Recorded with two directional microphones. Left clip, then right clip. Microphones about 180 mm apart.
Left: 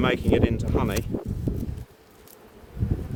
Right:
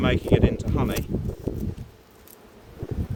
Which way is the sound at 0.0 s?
70° left (ahead or behind).